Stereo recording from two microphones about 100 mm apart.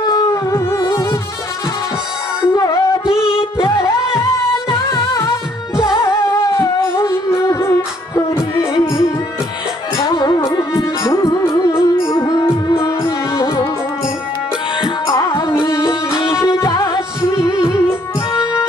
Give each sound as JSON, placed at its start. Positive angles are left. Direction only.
{"t": 0.0, "sound": "music", "side_deg": 40}
{"t": 2.5, "sound": "music", "side_deg": 35}
{"t": 10.1, "sound": "music", "side_deg": 45}
{"t": 10.5, "sound": "music", "side_deg": 35}
{"t": 15.2, "sound": "music", "side_deg": 55}
{"t": 16.4, "sound": "music", "side_deg": 35}
{"t": 17.3, "sound": "music", "side_deg": 30}